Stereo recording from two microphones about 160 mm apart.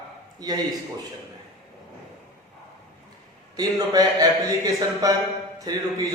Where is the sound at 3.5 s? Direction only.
25° right (ahead or behind).